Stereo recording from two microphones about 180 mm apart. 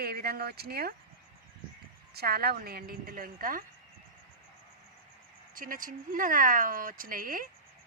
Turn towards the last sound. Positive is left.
turn(degrees=-50)  # may be behind; listen again after turning